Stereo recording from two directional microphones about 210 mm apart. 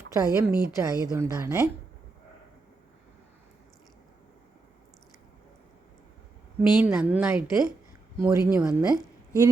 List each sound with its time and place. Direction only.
0.1 s a woman's voice: 15° right (ahead or behind)
6.6 s a woman's voice: 5° right (ahead or behind)